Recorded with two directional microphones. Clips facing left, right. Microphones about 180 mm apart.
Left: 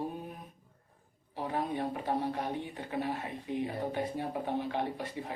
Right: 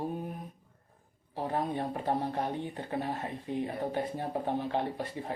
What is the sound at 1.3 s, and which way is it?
Speech, 45° right (ahead or behind).